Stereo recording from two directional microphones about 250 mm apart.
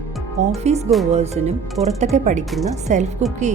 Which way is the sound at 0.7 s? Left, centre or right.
Right.